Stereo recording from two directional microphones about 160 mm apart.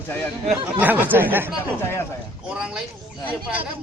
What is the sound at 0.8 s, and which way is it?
A man's voice, 10° right (ahead or behind).